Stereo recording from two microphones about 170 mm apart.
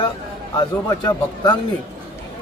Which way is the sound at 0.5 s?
25° left (ahead or behind).